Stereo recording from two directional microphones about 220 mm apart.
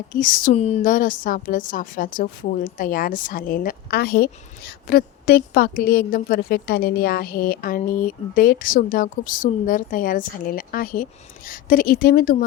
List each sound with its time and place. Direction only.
0.1 s a woman's voice: 40° left (ahead or behind)